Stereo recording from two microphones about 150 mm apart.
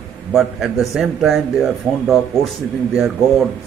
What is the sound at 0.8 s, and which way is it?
A man's voice, centre (ahead or behind).